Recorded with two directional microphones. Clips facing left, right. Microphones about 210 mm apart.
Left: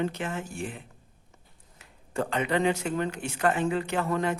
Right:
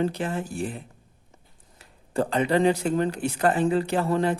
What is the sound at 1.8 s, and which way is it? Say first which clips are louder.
Speech: right 5 dB; 35° right (ahead or behind).